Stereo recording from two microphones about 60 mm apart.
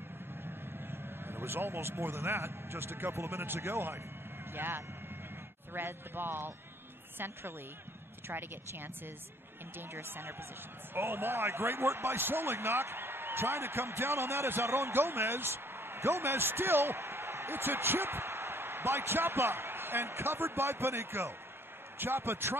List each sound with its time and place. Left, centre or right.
0.8 s speech: right